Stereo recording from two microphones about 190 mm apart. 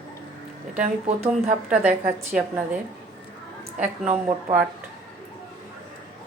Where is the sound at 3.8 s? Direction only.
40° right (ahead or behind).